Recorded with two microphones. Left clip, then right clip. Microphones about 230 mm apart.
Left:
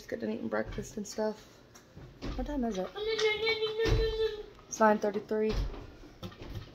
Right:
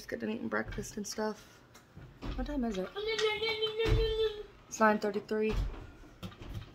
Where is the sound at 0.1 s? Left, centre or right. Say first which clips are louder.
Left 1 dB; centre.